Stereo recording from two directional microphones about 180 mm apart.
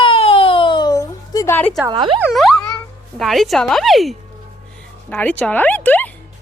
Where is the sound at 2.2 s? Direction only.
Centre (ahead or behind).